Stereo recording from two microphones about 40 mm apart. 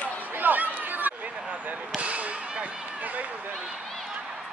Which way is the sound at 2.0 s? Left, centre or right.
Right.